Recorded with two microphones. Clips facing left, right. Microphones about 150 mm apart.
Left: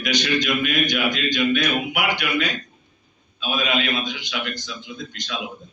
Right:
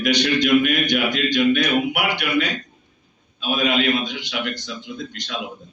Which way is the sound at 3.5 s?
55° right (ahead or behind).